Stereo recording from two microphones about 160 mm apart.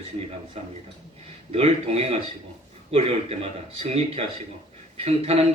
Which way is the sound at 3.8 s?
40° right (ahead or behind).